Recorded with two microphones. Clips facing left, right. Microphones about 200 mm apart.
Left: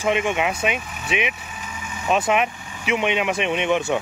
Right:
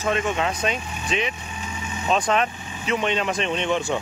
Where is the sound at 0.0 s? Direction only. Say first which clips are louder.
Left 2 dB; 15° left (ahead or behind).